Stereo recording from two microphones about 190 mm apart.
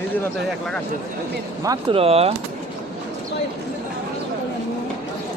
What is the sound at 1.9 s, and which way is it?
Speech, 30° right (ahead or behind).